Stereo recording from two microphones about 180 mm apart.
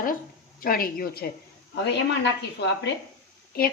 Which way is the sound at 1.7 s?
70° left (ahead or behind).